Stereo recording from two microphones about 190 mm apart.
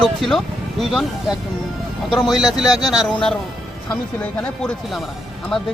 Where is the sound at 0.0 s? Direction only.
Centre (ahead or behind).